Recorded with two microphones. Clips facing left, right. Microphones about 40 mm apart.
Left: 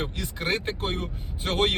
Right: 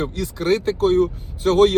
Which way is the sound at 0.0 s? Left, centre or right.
Left.